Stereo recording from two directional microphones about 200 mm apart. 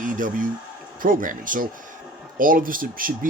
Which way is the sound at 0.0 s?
40° right (ahead or behind).